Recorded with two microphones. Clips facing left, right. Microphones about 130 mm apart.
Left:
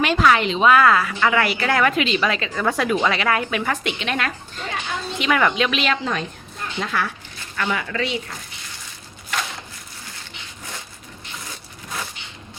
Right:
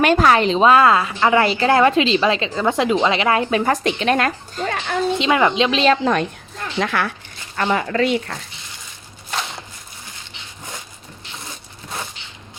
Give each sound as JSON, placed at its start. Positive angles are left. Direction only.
{"t": 0.0, "sound": "a woman's voice", "side_deg": -45}
{"t": 5.1, "sound": "a woman's voice", "side_deg": -25}
{"t": 6.7, "sound": "speech", "side_deg": -70}
{"t": 7.5, "sound": "speech", "side_deg": -35}